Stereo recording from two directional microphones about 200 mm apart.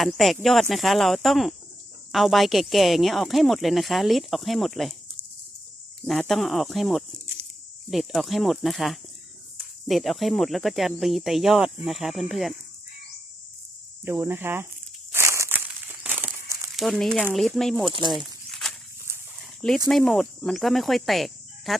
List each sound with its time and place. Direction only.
0.0 s speech: centre (ahead or behind)
6.1 s speech: centre (ahead or behind)
14.0 s speech: 10° right (ahead or behind)
15.1 s crumpling: 15° right (ahead or behind)
16.7 s speech: centre (ahead or behind)
17.8 s speech: 25° right (ahead or behind)
18.1 s a sound: centre (ahead or behind)
19.4 s dog: centre (ahead or behind)
19.9 s speech: centre (ahead or behind)